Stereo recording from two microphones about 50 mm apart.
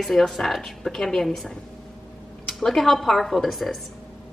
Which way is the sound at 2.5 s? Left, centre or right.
Centre.